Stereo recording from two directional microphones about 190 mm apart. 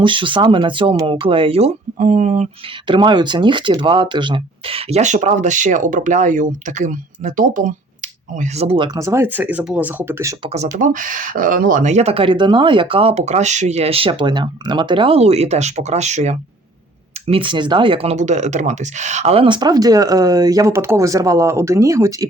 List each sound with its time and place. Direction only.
0.0 s speech: 25° right (ahead or behind)
2.8 s speech: 25° right (ahead or behind); by 7.7 s 45° right (ahead or behind)
8.4 s speech: 35° right (ahead or behind); by 10.3 s 15° right (ahead or behind)
10.5 s speech: 40° right (ahead or behind); by 22.3 s 15° right (ahead or behind)